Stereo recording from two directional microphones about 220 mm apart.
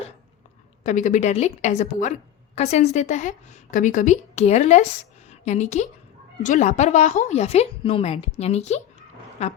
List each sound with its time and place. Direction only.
0.9 s a woman's voice: 35° left (ahead or behind)